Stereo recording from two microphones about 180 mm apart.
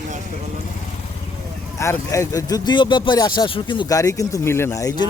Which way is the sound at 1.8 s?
15° left (ahead or behind).